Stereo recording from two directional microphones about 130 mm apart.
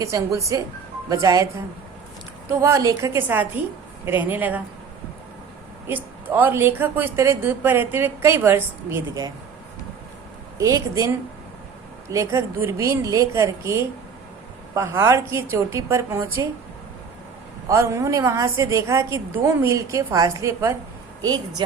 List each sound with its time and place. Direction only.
0.0 s a woman's voice: 25° right (ahead or behind)
5.9 s a woman's voice: 15° right (ahead or behind)
10.6 s a woman's voice: 25° right (ahead or behind)
12.1 s a woman's voice: 25° right (ahead or behind)
17.7 s a woman's voice: 20° right (ahead or behind)